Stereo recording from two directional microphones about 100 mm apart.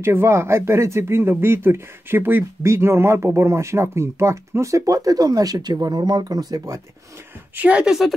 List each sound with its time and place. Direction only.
0.0 s speech: 25° right (ahead or behind)
7.5 s speech: 15° right (ahead or behind)